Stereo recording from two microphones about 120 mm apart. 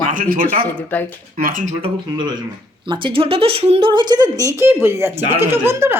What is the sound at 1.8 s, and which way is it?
Speech, 40° right (ahead or behind).